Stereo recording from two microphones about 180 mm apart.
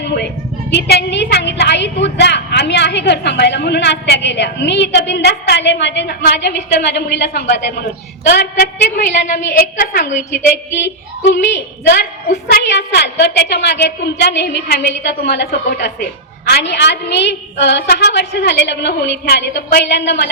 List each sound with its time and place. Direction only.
0.0 s a woman's voice: 65° left (ahead or behind); by 10.2 s 50° left (ahead or behind)
10.7 s a woman's voice: 75° left (ahead or behind)